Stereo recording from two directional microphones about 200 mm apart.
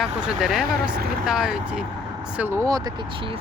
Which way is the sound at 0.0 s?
5° right (ahead or behind).